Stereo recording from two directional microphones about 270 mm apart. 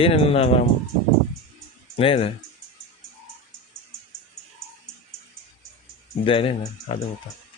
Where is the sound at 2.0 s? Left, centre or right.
Left.